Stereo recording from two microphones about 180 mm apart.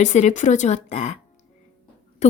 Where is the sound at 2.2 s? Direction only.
40° left (ahead or behind).